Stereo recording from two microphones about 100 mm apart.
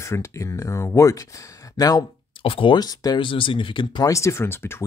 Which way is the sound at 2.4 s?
65° left (ahead or behind).